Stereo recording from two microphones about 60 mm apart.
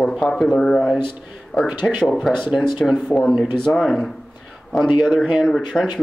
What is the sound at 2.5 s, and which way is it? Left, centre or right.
Speech, centre.